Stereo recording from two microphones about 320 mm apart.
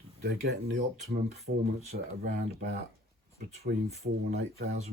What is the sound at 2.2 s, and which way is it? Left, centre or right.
Speech, right.